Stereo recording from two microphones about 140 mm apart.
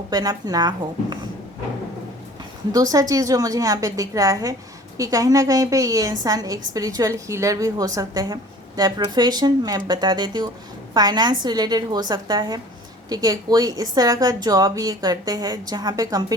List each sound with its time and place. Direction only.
0.1 s a woman's voice: 25° right (ahead or behind)
2.7 s a woman's voice: 25° right (ahead or behind)